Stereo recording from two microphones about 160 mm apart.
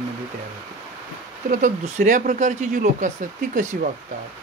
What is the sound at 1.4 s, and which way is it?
Speech, 55° right (ahead or behind).